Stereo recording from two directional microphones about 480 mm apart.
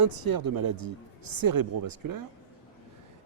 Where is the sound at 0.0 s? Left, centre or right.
Right.